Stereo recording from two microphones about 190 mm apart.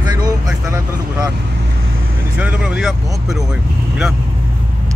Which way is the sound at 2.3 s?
5° right (ahead or behind).